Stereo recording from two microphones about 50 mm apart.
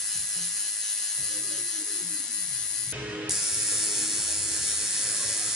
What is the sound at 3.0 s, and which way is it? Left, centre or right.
Music, right.